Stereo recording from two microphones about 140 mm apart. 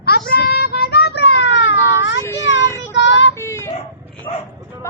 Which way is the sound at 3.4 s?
20° left (ahead or behind).